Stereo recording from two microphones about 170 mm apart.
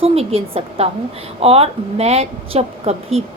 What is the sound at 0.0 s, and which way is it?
A woman's voice, 35° right (ahead or behind).